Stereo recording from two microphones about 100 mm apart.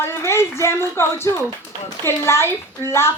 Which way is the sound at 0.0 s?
25° left (ahead or behind).